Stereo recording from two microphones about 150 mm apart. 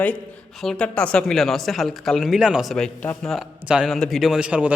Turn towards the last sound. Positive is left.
turn(degrees=-5)  # may be behind; listen again after turning